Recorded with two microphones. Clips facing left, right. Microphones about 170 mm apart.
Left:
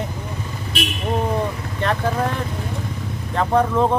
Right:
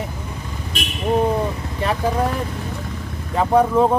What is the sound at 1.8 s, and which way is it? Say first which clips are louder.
Speech: right 1 dB; 10° right (ahead or behind).